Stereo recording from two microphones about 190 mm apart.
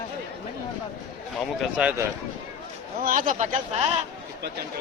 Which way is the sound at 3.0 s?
45° right (ahead or behind).